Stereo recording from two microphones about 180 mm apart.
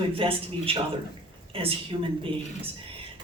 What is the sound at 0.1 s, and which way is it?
A woman's voice, 30° right (ahead or behind).